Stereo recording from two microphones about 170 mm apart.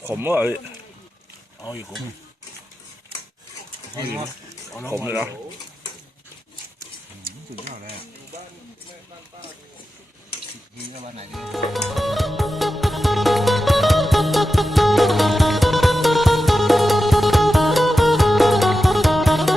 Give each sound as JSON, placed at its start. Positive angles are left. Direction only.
{"t": 0.0, "sound": "speech", "side_deg": -10}
{"t": 4.9, "sound": "speech", "side_deg": -15}
{"t": 11.3, "sound": "music", "side_deg": 0}